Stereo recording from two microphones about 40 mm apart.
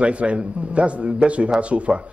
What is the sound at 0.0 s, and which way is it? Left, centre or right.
A man's voice, right.